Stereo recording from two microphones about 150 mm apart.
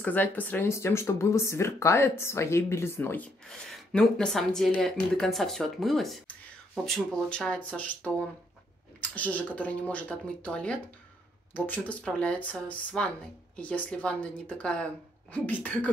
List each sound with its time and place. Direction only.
0.0 s speech: 10° left (ahead or behind)
9.1 s speech: 10° left (ahead or behind)